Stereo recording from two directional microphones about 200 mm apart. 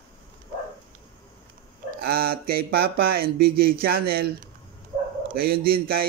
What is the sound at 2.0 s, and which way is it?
Speech, 50° right (ahead or behind).